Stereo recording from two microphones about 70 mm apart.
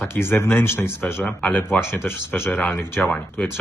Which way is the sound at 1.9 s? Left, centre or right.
Left.